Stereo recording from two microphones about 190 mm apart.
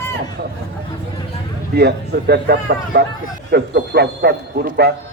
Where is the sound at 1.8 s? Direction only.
60° right (ahead or behind).